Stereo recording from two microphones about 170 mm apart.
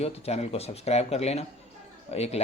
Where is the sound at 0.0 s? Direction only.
35° left (ahead or behind).